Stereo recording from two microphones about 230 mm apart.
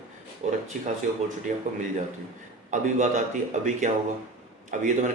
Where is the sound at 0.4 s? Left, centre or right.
Right.